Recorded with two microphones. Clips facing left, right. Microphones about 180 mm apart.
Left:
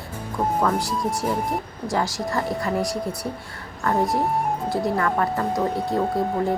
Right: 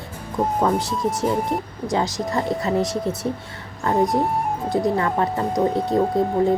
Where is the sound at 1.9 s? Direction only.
20° right (ahead or behind).